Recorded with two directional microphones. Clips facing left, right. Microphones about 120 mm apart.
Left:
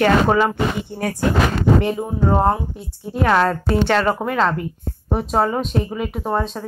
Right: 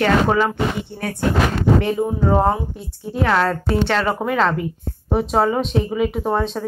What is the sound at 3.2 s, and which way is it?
Speech, 15° left (ahead or behind).